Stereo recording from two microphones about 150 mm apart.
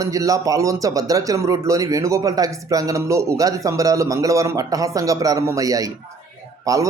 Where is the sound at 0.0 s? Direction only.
20° right (ahead or behind).